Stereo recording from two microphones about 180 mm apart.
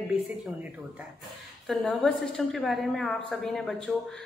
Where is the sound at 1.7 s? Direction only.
5° left (ahead or behind).